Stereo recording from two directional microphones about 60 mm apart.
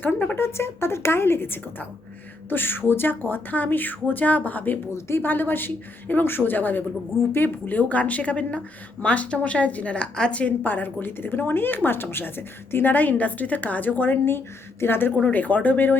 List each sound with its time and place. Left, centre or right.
0.0 s speech: left
0.3 s speech: left
4.9 s speech: left
5.2 s speech: left